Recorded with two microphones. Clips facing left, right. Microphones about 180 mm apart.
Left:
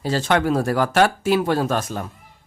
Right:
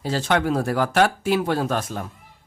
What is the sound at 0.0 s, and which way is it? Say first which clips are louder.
Speech: left 2 dB; 90° left.